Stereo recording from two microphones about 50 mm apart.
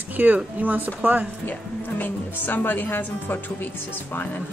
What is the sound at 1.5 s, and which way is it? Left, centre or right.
A woman's voice, left.